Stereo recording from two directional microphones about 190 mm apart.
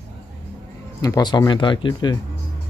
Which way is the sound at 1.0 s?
20° left (ahead or behind).